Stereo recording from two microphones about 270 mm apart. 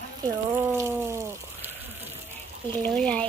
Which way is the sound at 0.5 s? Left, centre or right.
Centre.